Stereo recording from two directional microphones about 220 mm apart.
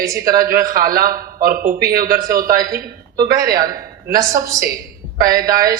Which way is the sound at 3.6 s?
40° right (ahead or behind).